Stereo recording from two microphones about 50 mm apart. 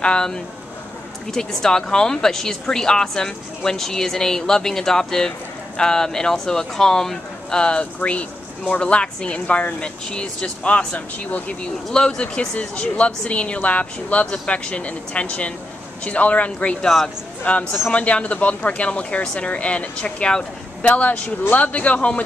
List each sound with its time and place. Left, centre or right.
0.0 s a woman's voice: centre
10.0 s a woman's voice: centre
10.9 s speech: left
11.9 s speech: centre
14.2 s a woman's voice: centre
16.8 s a woman's voice: centre
17.5 s speech: left
19.2 s a woman's voice: centre
19.5 s speech: left